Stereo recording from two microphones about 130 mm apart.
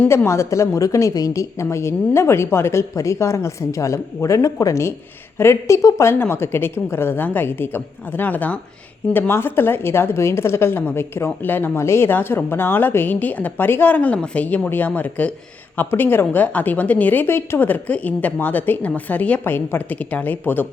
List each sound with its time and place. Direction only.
0.1 s a woman's voice: 20° left (ahead or behind)